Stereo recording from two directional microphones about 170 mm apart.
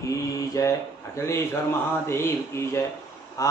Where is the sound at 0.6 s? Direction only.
20° left (ahead or behind).